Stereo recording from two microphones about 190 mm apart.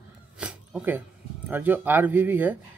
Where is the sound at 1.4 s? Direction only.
10° right (ahead or behind).